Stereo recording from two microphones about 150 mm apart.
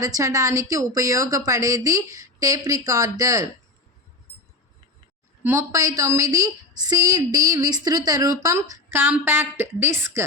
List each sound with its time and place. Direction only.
0.0 s a woman's voice: 20° right (ahead or behind)
5.4 s a woman's voice: 15° right (ahead or behind)